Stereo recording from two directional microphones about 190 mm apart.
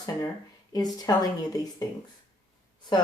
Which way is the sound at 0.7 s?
20° left (ahead or behind).